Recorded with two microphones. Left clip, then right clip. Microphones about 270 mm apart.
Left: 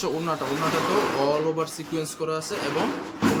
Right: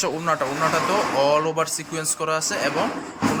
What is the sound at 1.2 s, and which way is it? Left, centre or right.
Speech, centre.